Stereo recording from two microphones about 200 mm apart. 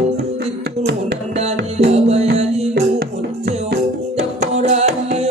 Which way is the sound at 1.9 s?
30° right (ahead or behind).